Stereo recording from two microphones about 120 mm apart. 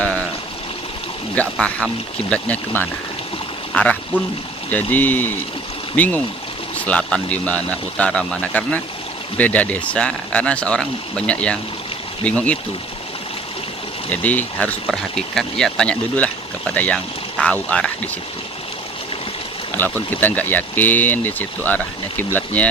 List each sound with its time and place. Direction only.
1.4 s speech: 10° left (ahead or behind)
4.7 s speech: 15° left (ahead or behind)
14.1 s speech: 15° left (ahead or behind)
19.7 s speech: 15° left (ahead or behind)